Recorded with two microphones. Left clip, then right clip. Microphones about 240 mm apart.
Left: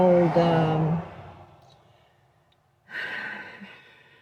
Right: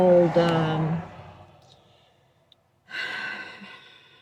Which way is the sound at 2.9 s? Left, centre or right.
Centre.